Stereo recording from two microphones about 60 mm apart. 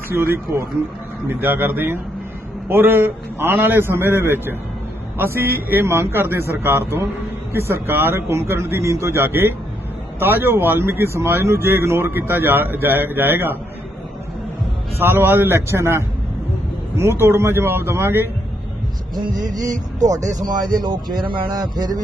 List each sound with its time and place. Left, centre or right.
0.1 s speech: right
5.8 s a man's voice: right
14.9 s a man's voice: right
19.5 s speech: right
21.5 s speech: right